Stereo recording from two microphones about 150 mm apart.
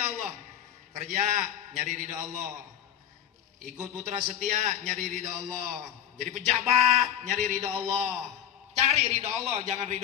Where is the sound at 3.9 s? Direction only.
50° right (ahead or behind).